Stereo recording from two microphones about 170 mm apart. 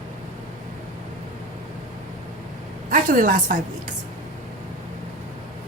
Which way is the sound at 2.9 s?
50° right (ahead or behind).